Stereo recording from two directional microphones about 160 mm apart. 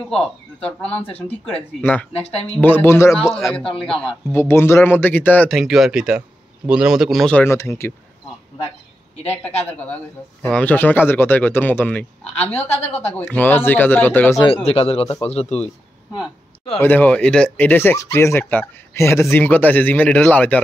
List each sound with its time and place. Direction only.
0.1 s speech: 5° left (ahead or behind)
3.1 s speech: centre (ahead or behind)
4.3 s speech: 15° left (ahead or behind)
5.6 s speech: centre (ahead or behind); by 7.9 s 15° left (ahead or behind)
9.2 s speech: 10° left (ahead or behind)
12.5 s a woman's voice: 40° left (ahead or behind)
13.0 s speech: 10° left (ahead or behind)
14.4 s speech: 35° left (ahead or behind)
16.8 s speech: 10° left (ahead or behind)